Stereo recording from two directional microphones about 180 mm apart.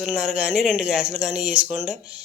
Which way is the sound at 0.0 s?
5° right (ahead or behind).